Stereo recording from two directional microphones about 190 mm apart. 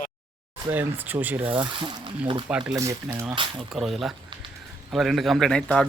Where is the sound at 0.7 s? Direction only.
10° right (ahead or behind).